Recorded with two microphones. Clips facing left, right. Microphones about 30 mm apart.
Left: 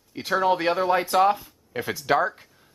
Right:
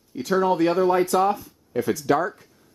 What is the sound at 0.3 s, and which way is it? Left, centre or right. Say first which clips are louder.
Speech: right 2 dB; left.